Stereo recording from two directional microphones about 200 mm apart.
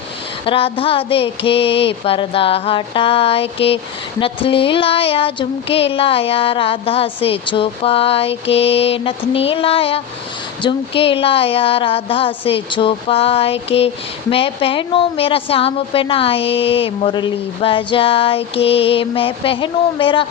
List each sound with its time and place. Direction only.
0.4 s a woman's voice: 25° left (ahead or behind)